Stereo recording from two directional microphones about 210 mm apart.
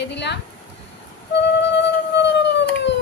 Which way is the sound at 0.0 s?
55° left (ahead or behind).